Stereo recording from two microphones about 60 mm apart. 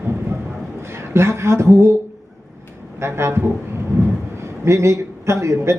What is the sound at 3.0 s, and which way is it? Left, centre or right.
Speech, right.